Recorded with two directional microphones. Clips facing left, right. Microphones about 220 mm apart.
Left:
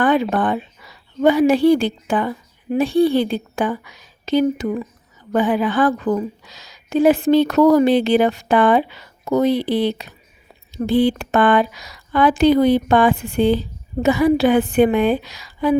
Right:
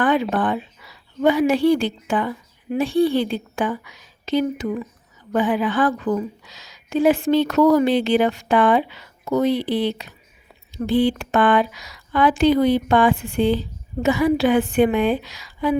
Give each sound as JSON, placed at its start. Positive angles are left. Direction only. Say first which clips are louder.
{"t": 0.0, "sound": "a woman's voice", "louder": "left 2 dB", "side_deg": 40}